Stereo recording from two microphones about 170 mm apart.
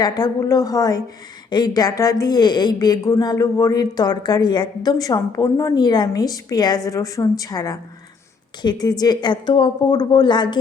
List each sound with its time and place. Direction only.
0.0 s a woman's voice: 25° left (ahead or behind)